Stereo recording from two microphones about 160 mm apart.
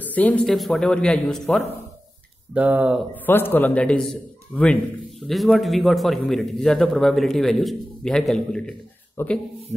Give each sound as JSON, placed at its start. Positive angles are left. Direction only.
{"t": 0.0, "sound": "a man's voice", "side_deg": 10}
{"t": 2.5, "sound": "speech", "side_deg": -10}
{"t": 3.3, "sound": "a man's voice", "side_deg": 15}